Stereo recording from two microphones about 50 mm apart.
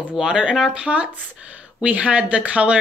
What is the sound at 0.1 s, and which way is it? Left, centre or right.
Speech, centre.